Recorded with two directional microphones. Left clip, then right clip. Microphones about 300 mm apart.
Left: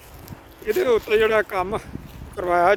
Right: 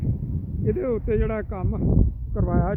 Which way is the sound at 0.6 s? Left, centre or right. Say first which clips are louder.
Left 5 dB; centre.